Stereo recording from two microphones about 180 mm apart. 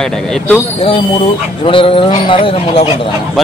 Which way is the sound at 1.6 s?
30° left (ahead or behind).